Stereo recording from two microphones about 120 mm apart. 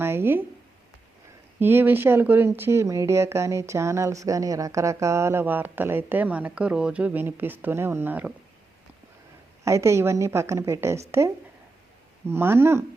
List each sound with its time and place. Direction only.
0.0 s a sound: 20° right (ahead or behind)
1.5 s speech: 15° right (ahead or behind)
9.6 s speech: 25° right (ahead or behind)
12.3 s speech: 20° right (ahead or behind)